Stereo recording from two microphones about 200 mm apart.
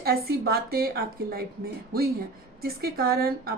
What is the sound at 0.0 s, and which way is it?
A woman's voice, 50° right (ahead or behind).